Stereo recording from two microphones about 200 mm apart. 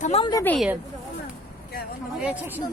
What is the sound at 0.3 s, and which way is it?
Speech, 15° left (ahead or behind).